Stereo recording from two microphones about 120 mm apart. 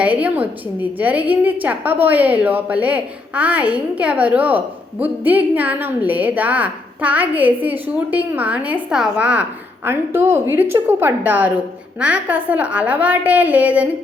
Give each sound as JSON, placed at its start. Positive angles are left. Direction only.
{"t": 0.0, "sound": "a woman's voice", "side_deg": -10}